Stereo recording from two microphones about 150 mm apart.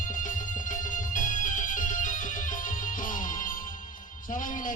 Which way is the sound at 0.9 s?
60° left (ahead or behind).